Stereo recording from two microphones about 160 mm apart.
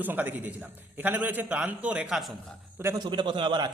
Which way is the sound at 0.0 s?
10° right (ahead or behind).